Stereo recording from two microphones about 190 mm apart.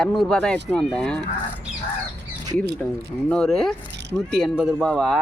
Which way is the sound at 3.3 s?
5° left (ahead or behind).